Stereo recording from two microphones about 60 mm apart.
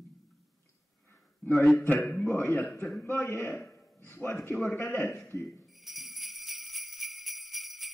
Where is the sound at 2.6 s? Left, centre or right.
Centre.